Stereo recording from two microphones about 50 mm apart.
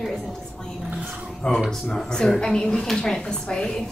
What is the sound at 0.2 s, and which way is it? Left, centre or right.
Music, centre.